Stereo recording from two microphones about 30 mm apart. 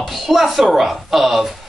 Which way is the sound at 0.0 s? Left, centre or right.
Centre.